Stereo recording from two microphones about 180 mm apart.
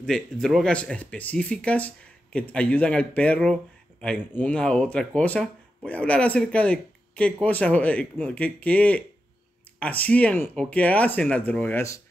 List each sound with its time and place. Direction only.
0.0 s speech: 5° left (ahead or behind)